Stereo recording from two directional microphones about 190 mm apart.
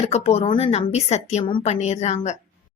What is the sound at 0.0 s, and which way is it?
A woman's voice, 35° left (ahead or behind).